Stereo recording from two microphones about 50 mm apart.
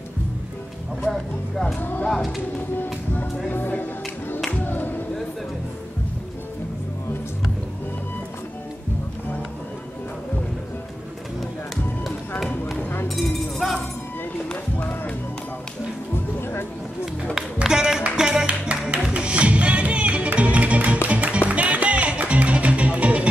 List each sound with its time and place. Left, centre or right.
1.1 s speech: centre
1.8 s speech: left
3.4 s speech: left
4.5 s music: left
13.1 s chink: centre
16.3 s music: left
17.0 s a sound: centre
17.6 s music: centre